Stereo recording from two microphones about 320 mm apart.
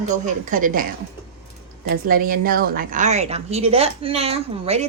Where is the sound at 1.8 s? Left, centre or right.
Right.